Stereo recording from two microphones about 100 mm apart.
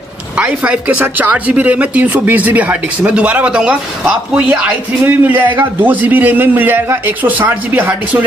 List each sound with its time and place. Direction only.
0.4 s speech: 10° right (ahead or behind)